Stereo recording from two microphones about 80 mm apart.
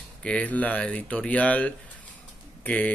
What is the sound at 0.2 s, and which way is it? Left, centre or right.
Speech, centre.